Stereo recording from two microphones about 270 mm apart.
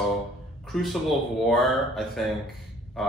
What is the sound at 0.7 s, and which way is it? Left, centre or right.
A man's voice, centre.